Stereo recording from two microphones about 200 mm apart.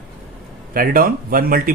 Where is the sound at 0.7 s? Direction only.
45° right (ahead or behind).